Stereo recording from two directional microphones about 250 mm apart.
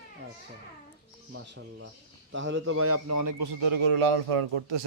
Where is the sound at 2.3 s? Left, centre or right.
Right.